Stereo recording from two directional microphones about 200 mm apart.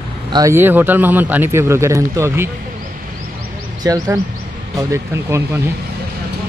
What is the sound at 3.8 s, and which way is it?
A man's voice, 15° right (ahead or behind).